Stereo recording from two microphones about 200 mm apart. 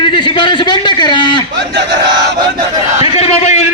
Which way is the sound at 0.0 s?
25° left (ahead or behind).